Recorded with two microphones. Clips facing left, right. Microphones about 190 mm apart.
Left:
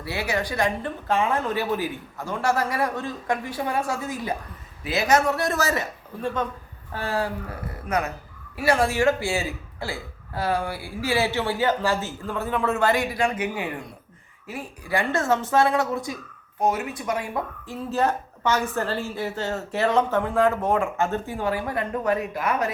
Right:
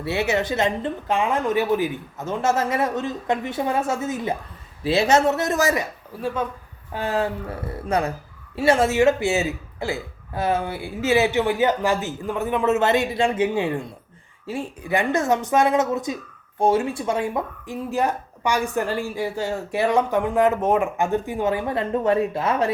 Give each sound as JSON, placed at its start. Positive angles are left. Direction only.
{"t": 0.0, "sound": "speech", "side_deg": -25}
{"t": 6.9, "sound": "speech", "side_deg": -20}